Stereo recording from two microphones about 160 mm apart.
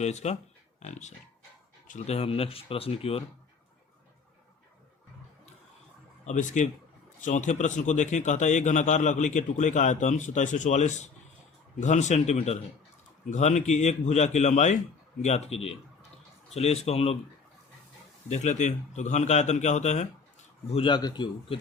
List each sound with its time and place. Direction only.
0.0 s speech: 45° left (ahead or behind)
6.2 s speech: 50° left (ahead or behind)
18.3 s speech: 45° left (ahead or behind)
20.7 s a man's voice: 30° left (ahead or behind)